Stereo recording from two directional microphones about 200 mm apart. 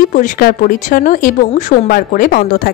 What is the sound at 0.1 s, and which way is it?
Speech, 45° left (ahead or behind).